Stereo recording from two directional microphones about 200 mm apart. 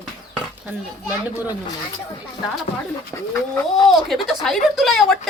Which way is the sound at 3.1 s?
10° left (ahead or behind).